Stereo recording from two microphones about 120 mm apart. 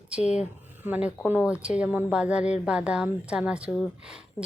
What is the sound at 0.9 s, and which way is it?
A woman's voice, 10° right (ahead or behind).